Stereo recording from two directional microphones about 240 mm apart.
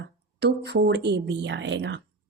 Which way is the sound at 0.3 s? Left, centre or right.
Right.